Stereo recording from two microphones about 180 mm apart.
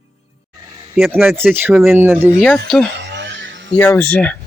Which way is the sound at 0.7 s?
25° right (ahead or behind).